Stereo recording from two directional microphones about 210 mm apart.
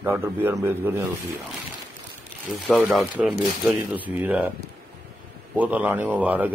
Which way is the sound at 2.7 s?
Centre (ahead or behind).